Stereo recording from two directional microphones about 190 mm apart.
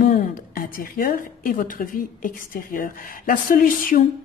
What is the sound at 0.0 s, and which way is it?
A woman's voice, 50° left (ahead or behind).